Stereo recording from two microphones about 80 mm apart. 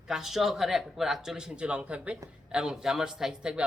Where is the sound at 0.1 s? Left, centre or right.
Centre.